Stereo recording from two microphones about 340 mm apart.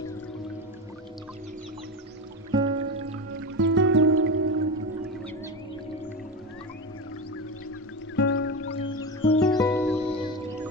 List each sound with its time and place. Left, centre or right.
2.5 s music: centre
3.3 s music: right
8.1 s music: left
8.7 s music: centre